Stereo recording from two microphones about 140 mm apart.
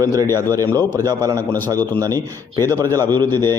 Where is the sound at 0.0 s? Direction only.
25° right (ahead or behind).